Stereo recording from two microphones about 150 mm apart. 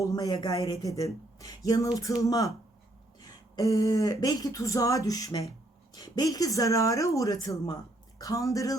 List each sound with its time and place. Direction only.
0.0 s speech: 25° left (ahead or behind)